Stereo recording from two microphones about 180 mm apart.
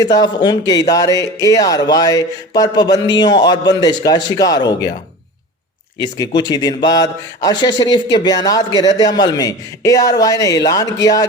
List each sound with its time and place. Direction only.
0.0 s speech: 20° left (ahead or behind)
6.0 s speech: 25° left (ahead or behind)